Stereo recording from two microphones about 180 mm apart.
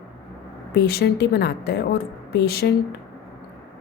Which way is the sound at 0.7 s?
65° left (ahead or behind).